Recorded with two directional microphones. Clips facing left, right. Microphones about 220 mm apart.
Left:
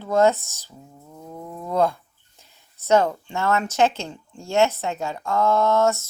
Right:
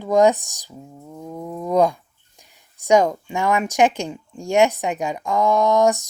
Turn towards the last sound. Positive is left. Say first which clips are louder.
# right 3 dB
turn(degrees=-15)  # may be behind; listen again after turning